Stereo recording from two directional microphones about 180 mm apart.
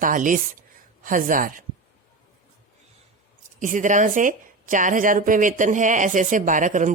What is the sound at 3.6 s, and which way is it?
A woman's voice, 45° right (ahead or behind).